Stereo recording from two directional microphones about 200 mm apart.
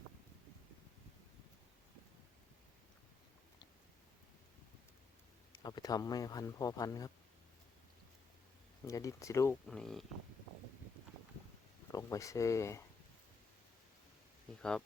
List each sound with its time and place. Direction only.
5.5 s speech: 20° left (ahead or behind)
8.9 s speech: 15° left (ahead or behind)
9.6 s speech: centre (ahead or behind)
11.9 s speech: 15° left (ahead or behind)
14.6 s speech: 5° left (ahead or behind)